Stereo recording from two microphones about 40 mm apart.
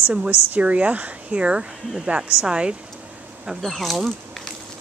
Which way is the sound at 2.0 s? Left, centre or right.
Right.